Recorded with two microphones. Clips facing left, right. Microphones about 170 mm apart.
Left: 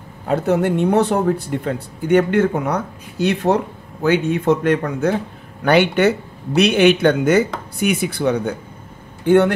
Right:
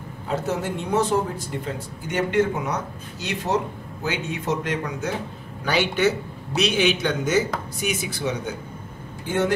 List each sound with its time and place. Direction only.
0.3 s speech: 60° left (ahead or behind)